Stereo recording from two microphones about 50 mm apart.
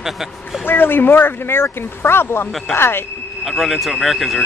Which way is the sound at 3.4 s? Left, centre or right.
Centre.